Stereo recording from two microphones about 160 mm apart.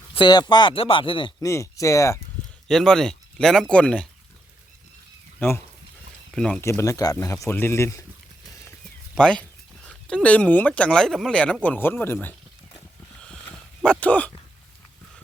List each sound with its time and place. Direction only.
0.1 s speech: 30° left (ahead or behind)
1.4 s speech: 20° left (ahead or behind)
2.6 s speech: 5° left (ahead or behind)
5.4 s speech: 15° left (ahead or behind)
6.6 s speech: 15° left (ahead or behind)
9.1 s speech: 5° left (ahead or behind)
13.8 s speech: 5° left (ahead or behind)